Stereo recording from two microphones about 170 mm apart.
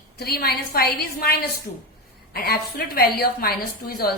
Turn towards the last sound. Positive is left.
turn(degrees=65)  # may be behind; listen again after turning